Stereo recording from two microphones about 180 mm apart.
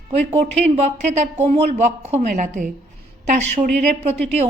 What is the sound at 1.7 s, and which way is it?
A woman's voice, 35° right (ahead or behind).